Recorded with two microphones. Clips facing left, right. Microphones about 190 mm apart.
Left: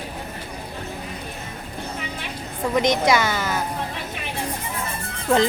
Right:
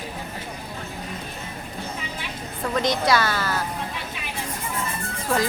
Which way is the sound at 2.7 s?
20° left (ahead or behind).